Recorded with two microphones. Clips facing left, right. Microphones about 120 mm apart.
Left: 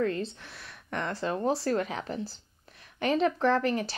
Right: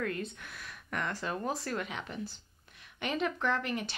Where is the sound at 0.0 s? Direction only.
30° left (ahead or behind).